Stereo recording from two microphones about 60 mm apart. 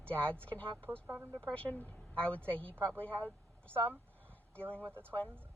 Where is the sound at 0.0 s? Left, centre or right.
Left.